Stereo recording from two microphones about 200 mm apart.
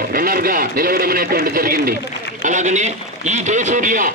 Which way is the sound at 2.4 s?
35° right (ahead or behind).